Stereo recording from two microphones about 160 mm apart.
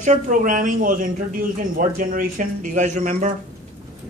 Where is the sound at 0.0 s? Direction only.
50° right (ahead or behind).